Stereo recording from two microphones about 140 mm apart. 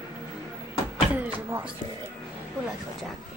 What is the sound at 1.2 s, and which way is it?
Speech, 15° right (ahead or behind).